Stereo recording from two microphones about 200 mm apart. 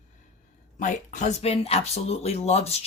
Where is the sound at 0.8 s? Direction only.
40° left (ahead or behind).